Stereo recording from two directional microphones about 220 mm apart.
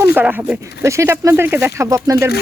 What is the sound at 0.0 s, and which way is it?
Speech, 10° right (ahead or behind).